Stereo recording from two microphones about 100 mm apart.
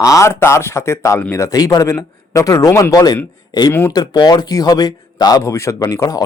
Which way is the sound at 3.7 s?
25° left (ahead or behind).